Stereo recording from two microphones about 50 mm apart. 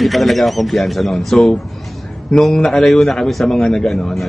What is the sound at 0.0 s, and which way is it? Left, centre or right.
A man's voice, centre.